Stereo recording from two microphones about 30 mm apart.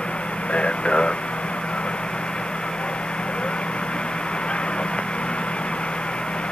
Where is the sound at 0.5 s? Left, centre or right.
Left.